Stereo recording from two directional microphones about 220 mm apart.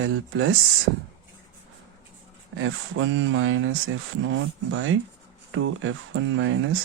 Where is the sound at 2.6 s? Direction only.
60° right (ahead or behind).